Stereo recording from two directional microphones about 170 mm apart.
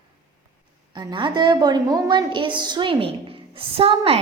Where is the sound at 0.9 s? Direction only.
30° right (ahead or behind).